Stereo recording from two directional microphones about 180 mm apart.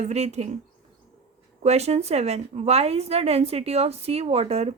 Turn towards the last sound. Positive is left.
turn(degrees=-35)  # may be behind; listen again after turning